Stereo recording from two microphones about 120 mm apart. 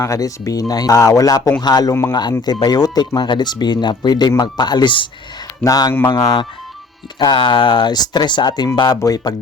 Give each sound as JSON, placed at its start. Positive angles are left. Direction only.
{"t": 0.0, "sound": "speech", "side_deg": 25}